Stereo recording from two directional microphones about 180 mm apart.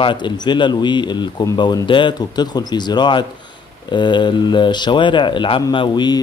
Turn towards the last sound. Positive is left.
turn(degrees=25)  # may be behind; listen again after turning